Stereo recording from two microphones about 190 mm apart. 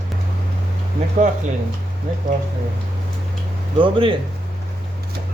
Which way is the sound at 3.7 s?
25° right (ahead or behind).